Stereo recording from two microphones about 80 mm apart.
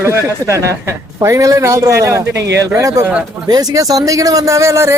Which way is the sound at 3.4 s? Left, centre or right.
Right.